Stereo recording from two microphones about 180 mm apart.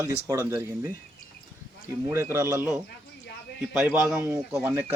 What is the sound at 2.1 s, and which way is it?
Speech, 15° right (ahead or behind).